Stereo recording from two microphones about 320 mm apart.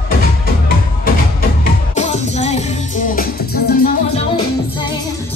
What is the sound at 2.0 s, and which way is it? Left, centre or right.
Music, left.